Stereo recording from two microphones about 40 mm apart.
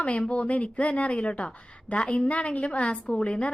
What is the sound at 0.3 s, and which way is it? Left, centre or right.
Speech, left.